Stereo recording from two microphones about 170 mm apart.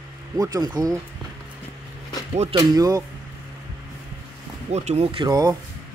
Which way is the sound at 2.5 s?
20° right (ahead or behind).